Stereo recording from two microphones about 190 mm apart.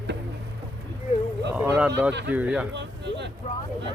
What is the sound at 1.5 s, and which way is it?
Speech, 5° right (ahead or behind).